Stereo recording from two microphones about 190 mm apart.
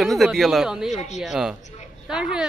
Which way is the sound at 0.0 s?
Centre (ahead or behind).